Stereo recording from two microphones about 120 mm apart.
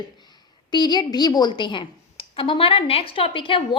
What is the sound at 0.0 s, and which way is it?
A woman's voice, 35° left (ahead or behind).